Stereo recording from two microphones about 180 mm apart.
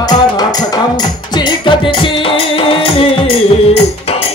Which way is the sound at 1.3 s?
25° left (ahead or behind).